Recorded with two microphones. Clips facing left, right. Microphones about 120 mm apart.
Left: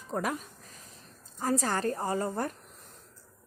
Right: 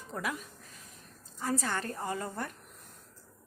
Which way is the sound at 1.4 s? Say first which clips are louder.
Left 4 dB; 40° left (ahead or behind).